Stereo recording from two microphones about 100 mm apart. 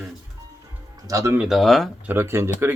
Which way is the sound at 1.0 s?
30° right (ahead or behind).